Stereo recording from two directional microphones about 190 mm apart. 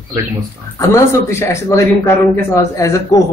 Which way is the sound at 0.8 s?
15° left (ahead or behind).